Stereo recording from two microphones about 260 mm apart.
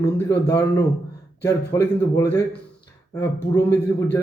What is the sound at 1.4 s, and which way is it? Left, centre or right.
Speech, centre.